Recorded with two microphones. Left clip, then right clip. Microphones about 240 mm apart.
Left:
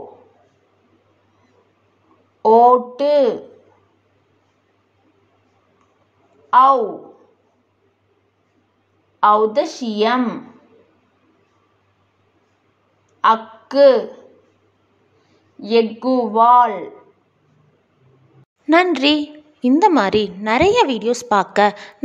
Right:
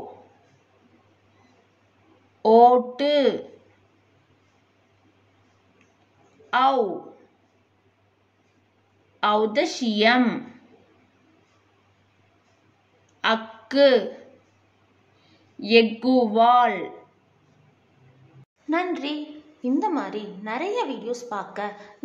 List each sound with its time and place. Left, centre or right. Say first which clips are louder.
2.4 s a sound: left 4 dB; centre
6.5 s a woman's voice: left 9 dB; centre
9.2 s a woman's voice: left 7 dB; centre
13.2 s a woman's voice: left 8 dB; centre
15.6 s a woman's voice: left 2 dB; centre
18.7 s a woman's voice: left 12 dB; left